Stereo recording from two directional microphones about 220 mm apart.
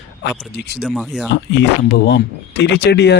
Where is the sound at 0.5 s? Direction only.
50° left (ahead or behind).